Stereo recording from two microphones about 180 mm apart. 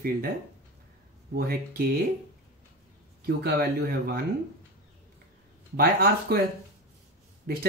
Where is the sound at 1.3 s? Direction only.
55° right (ahead or behind).